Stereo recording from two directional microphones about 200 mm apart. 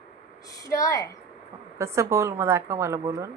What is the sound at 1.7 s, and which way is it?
Mantra, 15° right (ahead or behind).